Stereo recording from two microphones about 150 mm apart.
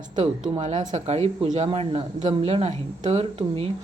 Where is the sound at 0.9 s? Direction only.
45° right (ahead or behind).